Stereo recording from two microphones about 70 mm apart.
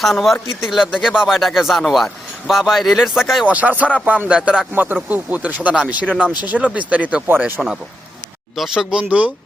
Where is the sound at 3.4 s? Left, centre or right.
Right.